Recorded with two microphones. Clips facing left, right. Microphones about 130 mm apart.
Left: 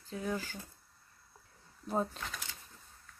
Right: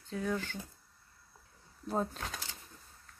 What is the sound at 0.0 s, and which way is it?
Speech, 5° left (ahead or behind).